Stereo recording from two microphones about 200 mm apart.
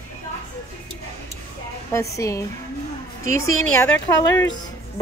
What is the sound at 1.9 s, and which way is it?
A woman's voice, 15° left (ahead or behind).